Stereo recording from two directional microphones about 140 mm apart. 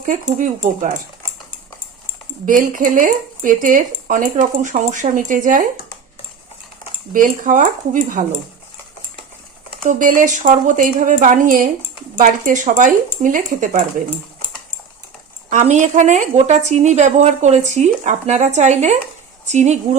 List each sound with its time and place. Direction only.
0.0 s speech: 70° right (ahead or behind)
2.5 s speech: 70° right (ahead or behind)
7.1 s speech: 70° right (ahead or behind)
9.8 s speech: 75° right (ahead or behind)
15.4 s a woman's voice: 60° right (ahead or behind)